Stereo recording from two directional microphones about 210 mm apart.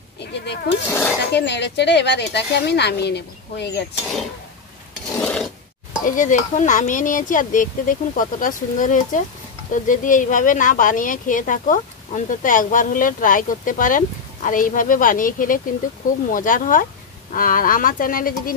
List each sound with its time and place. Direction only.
0.2 s speech: 55° left (ahead or behind)
0.8 s a sound: 10° left (ahead or behind)
1.3 s speech: 55° left (ahead or behind)
4.0 s speech: centre (ahead or behind)
5.2 s filing: 5° left (ahead or behind)
6.0 s a woman's voice: 35° left (ahead or behind)